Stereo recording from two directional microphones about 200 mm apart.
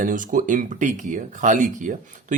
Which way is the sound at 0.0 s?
40° right (ahead or behind).